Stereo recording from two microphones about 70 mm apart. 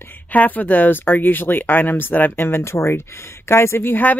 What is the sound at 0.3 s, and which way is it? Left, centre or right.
Speech, left.